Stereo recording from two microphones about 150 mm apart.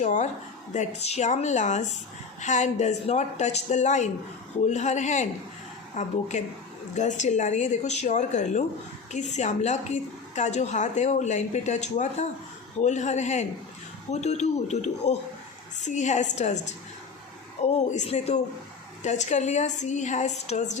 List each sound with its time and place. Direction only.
0.0 s a woman's voice: 55° left (ahead or behind)